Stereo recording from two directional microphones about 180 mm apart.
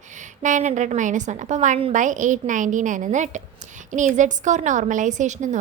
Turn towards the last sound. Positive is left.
turn(degrees=-40)  # may be behind; listen again after turning